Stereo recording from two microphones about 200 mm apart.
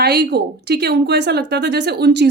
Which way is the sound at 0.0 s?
55° right (ahead or behind).